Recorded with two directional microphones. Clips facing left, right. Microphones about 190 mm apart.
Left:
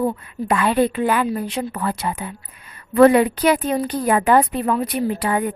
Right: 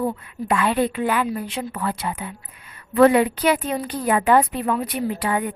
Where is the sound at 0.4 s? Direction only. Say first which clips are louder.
Left 3 dB; 40° left (ahead or behind).